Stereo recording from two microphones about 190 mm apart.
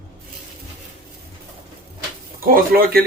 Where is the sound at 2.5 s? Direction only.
50° right (ahead or behind).